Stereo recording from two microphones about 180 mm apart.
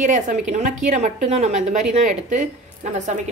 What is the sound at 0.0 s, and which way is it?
A woman's voice, 45° right (ahead or behind).